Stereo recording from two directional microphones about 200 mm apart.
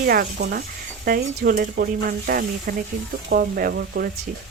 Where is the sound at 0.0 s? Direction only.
50° right (ahead or behind).